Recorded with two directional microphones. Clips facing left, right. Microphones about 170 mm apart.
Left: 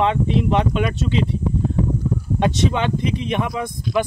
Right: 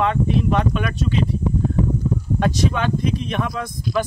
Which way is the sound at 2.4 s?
20° left (ahead or behind).